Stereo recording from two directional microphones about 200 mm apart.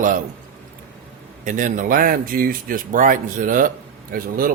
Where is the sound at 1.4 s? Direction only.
40° right (ahead or behind).